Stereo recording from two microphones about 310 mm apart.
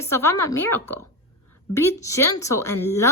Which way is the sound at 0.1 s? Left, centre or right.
Centre.